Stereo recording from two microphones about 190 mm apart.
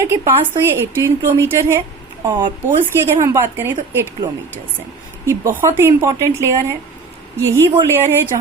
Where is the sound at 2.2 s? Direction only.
25° right (ahead or behind).